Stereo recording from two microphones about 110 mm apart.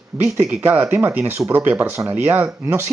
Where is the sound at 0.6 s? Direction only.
15° right (ahead or behind).